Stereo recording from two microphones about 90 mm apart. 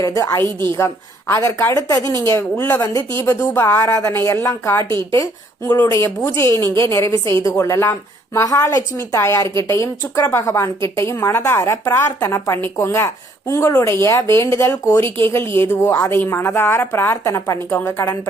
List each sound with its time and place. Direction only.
0.0 s a woman's voice: 35° left (ahead or behind)
2.6 s a woman's voice: 20° left (ahead or behind)
4.8 s a woman's voice: 55° right (ahead or behind)
5.1 s a woman's voice: 35° left (ahead or behind)
10.3 s a woman's voice: 30° left (ahead or behind)